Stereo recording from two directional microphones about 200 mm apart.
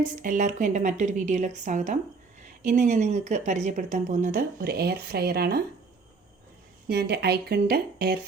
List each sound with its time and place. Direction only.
0.0 s speech: 40° right (ahead or behind)
6.8 s speech: 55° right (ahead or behind)